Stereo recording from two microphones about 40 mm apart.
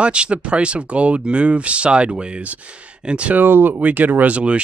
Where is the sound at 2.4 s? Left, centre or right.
Right.